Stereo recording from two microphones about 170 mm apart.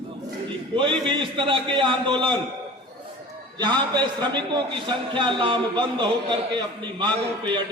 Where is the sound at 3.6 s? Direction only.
25° right (ahead or behind).